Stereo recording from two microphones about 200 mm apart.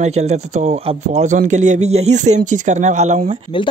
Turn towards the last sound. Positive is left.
turn(degrees=-35)  # may be behind; listen again after turning